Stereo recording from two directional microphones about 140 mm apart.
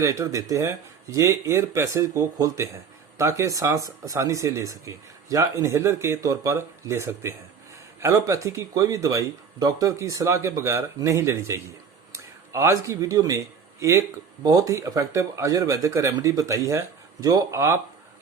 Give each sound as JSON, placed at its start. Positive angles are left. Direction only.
{"t": 0.0, "sound": "speech", "side_deg": -20}